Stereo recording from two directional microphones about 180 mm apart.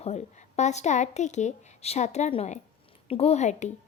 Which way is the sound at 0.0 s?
40° left (ahead or behind).